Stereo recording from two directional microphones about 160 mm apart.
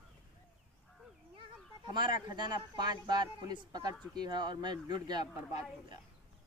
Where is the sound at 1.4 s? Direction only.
30° right (ahead or behind).